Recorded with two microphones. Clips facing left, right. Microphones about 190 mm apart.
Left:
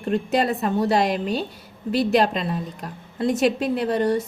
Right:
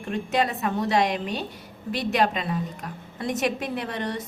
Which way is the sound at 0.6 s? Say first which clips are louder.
Left 4 dB; 30° left (ahead or behind).